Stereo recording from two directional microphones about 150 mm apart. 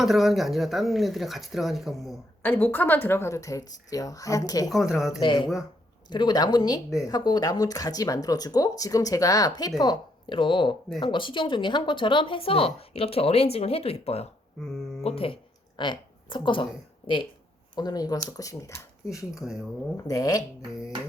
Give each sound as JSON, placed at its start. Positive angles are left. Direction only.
{"t": 0.0, "sound": "speech", "side_deg": 0}
{"t": 2.4, "sound": "speech", "side_deg": 15}
{"t": 4.7, "sound": "speech", "side_deg": 0}
{"t": 5.2, "sound": "speech", "side_deg": 30}
{"t": 14.6, "sound": "speech", "side_deg": 0}
{"t": 15.0, "sound": "a woman's voice", "side_deg": 40}
{"t": 17.7, "sound": "speech", "side_deg": 25}
{"t": 19.3, "sound": "speech", "side_deg": -5}
{"t": 20.1, "sound": "speech", "side_deg": 25}